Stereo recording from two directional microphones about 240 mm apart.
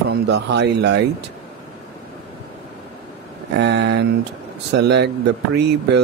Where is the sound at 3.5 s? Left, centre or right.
Right.